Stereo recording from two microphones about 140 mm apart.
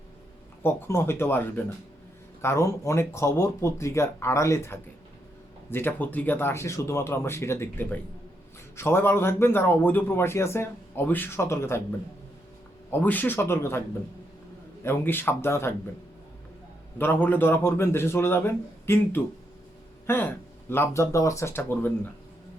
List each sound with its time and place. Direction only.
0.6 s speech: 20° left (ahead or behind)
14.8 s speech: 15° left (ahead or behind)
17.0 s speech: 15° left (ahead or behind)